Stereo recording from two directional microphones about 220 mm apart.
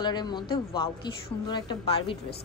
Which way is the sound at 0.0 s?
20° left (ahead or behind).